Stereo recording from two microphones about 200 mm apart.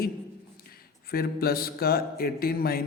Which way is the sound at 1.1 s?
50° left (ahead or behind).